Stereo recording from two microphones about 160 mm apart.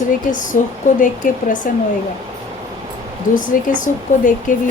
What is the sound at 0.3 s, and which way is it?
Speech, 55° left (ahead or behind).